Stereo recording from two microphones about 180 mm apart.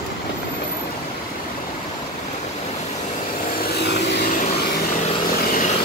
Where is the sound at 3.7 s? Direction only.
65° left (ahead or behind).